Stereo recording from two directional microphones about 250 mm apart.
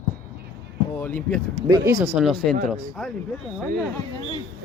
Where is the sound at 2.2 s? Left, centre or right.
Centre.